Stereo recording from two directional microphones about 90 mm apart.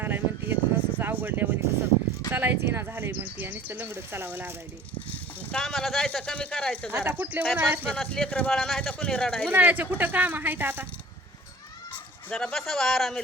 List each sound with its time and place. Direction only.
0.0 s a sound: 25° right (ahead or behind)
2.3 s speech: 20° right (ahead or behind)
5.6 s speech: centre (ahead or behind)
6.9 s speech: 20° right (ahead or behind)
7.5 s speech: 10° right (ahead or behind)
7.9 s speech: 10° left (ahead or behind)
8.8 s speech: 15° left (ahead or behind)
9.5 s speech: 20° right (ahead or behind)
12.3 s speech: 5° left (ahead or behind)